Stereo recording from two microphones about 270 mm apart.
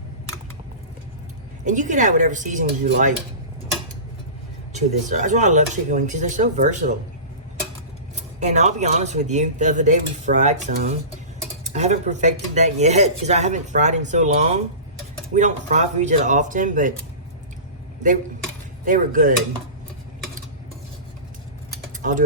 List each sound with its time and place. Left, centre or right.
1.6 s speech: right
4.7 s speech: right
8.1 s speech: right
18.9 s speech: right